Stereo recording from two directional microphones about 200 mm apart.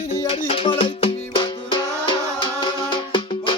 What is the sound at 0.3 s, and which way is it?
Music, 30° left (ahead or behind).